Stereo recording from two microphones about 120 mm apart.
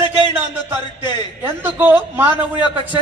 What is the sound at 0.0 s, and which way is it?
Music, 20° right (ahead or behind).